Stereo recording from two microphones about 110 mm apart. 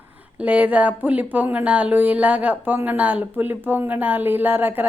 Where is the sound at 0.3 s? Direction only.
10° right (ahead or behind).